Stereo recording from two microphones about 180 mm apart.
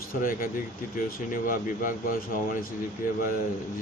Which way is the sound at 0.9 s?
50° left (ahead or behind).